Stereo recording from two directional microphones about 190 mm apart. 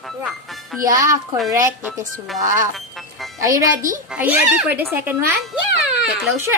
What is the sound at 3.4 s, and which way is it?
A child's voice, 15° right (ahead or behind).